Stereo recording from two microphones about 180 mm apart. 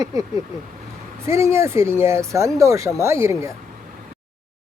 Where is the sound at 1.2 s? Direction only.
15° right (ahead or behind).